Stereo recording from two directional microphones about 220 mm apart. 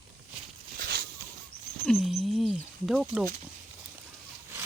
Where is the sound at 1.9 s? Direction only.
Centre (ahead or behind).